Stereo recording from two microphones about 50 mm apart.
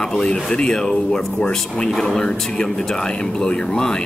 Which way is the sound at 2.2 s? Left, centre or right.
Centre.